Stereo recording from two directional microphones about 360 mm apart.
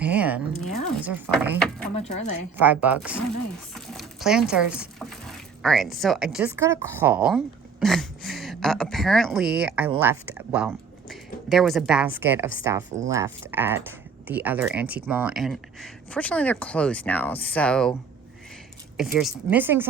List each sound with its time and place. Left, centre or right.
0.0 s a sound: centre
0.6 s a woman's voice: centre
2.0 s a woman's voice: centre
2.6 s a woman's voice: centre
3.8 s sewing machine: centre
5.6 s a woman's voice: centre
18.9 s a woman's voice: centre